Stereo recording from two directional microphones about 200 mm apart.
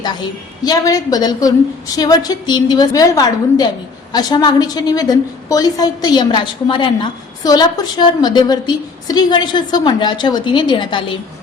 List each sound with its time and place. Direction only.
0.0 s a woman's voice: 20° left (ahead or behind)